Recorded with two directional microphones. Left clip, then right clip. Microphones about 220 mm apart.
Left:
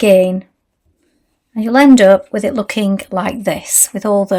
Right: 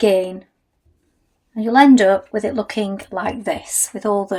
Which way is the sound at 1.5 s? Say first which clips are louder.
Left 2 dB; 50° left (ahead or behind).